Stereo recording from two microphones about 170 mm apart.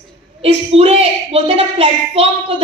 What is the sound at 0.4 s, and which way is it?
Speech, 35° right (ahead or behind).